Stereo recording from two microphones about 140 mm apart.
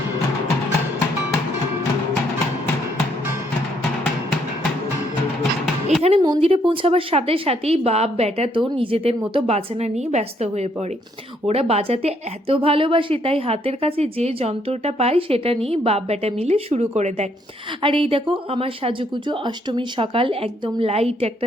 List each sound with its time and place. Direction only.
5.4 s music: centre (ahead or behind)
6.1 s a woman's voice: 35° right (ahead or behind); by 17.2 s 55° right (ahead or behind)
17.8 s speech: 40° right (ahead or behind)